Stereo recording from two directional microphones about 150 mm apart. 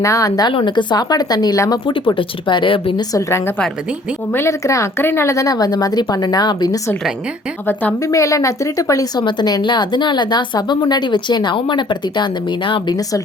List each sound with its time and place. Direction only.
0.0 s speech: 20° left (ahead or behind)
3.1 s speech: 20° left (ahead or behind)
7.7 s speech: 15° left (ahead or behind); by 13.0 s 30° left (ahead or behind)